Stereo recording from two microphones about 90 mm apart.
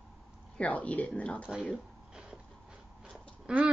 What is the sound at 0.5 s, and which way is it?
Speech, 15° left (ahead or behind).